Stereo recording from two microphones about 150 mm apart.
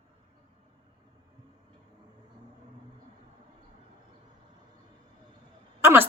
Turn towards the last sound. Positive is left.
turn(degrees=-15)  # may be behind; listen again after turning